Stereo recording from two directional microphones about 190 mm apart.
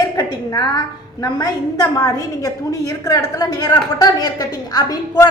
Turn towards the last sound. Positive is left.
turn(degrees=20)  # may be behind; listen again after turning